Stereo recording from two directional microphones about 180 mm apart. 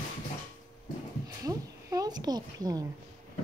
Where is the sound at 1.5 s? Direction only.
20° right (ahead or behind).